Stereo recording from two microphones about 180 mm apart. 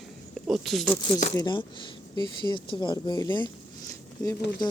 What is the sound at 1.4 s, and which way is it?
Speech, 25° left (ahead or behind).